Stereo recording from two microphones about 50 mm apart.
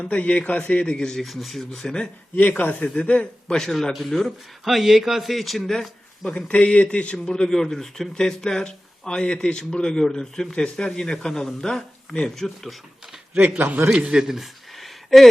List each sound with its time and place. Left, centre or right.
0.1 s a man's voice: left
1.2 s a man's voice: centre
2.5 s a man's voice: left
3.5 s a man's voice: centre
6.3 s a man's voice: left; by 12.7 s centre
14.0 s speech: centre